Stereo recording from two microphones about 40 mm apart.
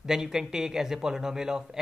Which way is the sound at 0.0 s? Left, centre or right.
Centre.